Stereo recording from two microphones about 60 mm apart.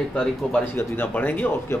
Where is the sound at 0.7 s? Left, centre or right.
Left.